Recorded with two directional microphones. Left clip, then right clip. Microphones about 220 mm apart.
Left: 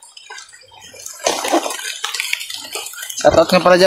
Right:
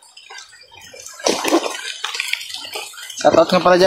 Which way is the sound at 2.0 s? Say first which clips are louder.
Left 1 dB; 30° left (ahead or behind).